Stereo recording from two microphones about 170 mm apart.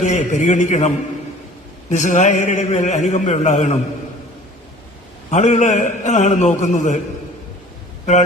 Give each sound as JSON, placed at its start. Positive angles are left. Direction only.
{"t": 0.0, "sound": "a man's voice", "side_deg": 45}
{"t": 5.3, "sound": "a man's voice", "side_deg": 45}